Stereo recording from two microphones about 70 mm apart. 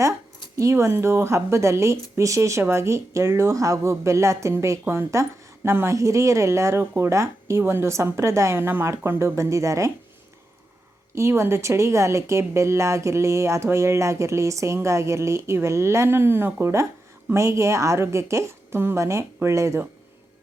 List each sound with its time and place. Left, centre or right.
0.5 s a woman's voice: right
11.1 s a woman's voice: right